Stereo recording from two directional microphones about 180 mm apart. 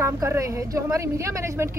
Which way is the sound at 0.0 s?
15° right (ahead or behind).